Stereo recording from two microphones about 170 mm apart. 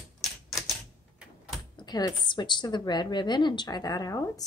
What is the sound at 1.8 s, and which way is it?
A woman's voice, 25° left (ahead or behind).